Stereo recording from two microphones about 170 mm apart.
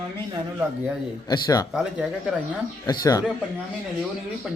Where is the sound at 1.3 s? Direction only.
20° left (ahead or behind).